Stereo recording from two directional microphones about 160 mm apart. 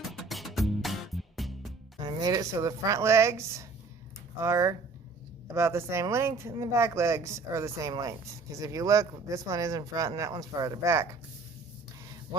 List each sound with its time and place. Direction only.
0.1 s music: centre (ahead or behind)
2.0 s speech: 25° right (ahead or behind)